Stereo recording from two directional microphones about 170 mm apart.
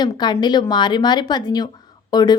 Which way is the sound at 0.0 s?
25° left (ahead or behind).